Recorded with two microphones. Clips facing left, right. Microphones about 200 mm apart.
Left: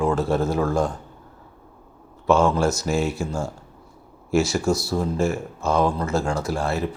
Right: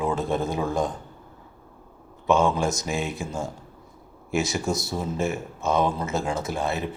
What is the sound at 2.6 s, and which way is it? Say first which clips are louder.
Speech: left 4 dB; 15° right (ahead or behind).